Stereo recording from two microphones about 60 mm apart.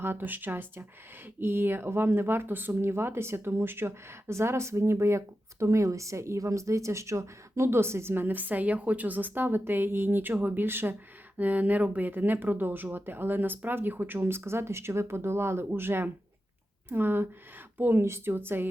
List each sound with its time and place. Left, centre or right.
0.0 s speech: right